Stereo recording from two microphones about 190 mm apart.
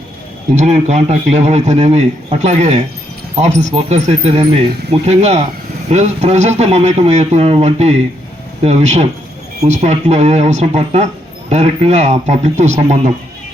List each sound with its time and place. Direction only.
0.5 s speech: 35° right (ahead or behind)